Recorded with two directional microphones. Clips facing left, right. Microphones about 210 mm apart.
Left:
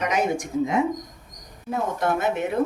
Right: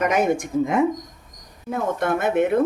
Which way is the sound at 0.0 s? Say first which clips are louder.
Right 4 dB; 50° right (ahead or behind).